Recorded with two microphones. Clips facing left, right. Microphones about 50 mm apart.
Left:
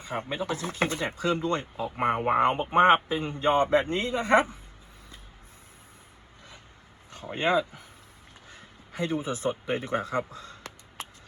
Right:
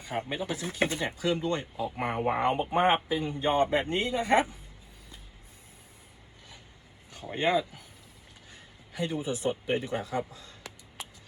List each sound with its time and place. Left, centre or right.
0.0 s speech: left
7.3 s speech: left
8.4 s a sound: left